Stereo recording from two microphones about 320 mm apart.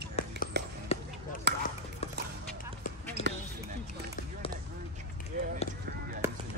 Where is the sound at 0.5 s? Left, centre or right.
Right.